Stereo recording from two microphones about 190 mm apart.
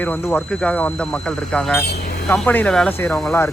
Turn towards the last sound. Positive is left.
turn(degrees=5)  # may be behind; listen again after turning